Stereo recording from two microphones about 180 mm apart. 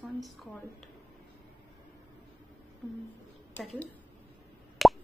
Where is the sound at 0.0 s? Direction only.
Centre (ahead or behind).